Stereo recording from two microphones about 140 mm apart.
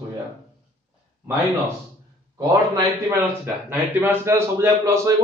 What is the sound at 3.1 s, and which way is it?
A man's voice, 15° right (ahead or behind).